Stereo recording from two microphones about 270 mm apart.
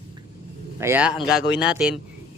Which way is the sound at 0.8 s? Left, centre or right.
Centre.